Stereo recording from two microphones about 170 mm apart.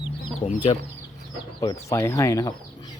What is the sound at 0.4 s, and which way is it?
Speech, 30° left (ahead or behind).